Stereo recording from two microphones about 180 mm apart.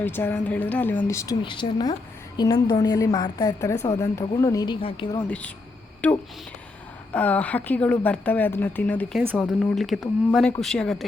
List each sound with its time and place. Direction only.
0.0 s a woman's voice: 10° left (ahead or behind); by 5.2 s 30° left (ahead or behind)
6.0 s a woman's voice: 10° left (ahead or behind)
9.2 s speech: 5° right (ahead or behind)